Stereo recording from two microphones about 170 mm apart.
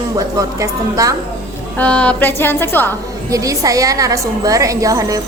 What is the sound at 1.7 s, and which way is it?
A woman's voice, 5° left (ahead or behind).